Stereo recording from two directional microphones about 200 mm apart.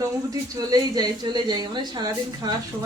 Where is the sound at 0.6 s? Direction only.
20° right (ahead or behind).